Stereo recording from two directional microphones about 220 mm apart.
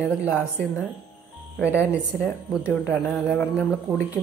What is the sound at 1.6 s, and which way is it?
Speech, 10° left (ahead or behind).